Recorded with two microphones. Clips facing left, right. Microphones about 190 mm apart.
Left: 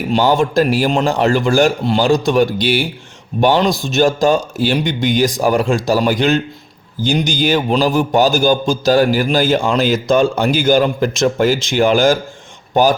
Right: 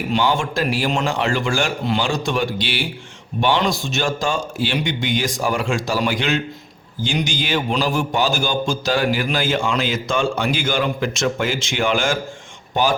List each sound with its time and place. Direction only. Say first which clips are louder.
0.1 s a man's voice: left 7 dB; 40° left (ahead or behind)